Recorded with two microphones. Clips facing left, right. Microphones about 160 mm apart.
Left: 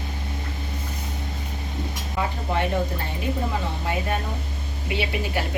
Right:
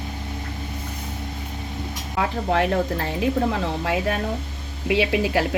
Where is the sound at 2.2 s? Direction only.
85° right.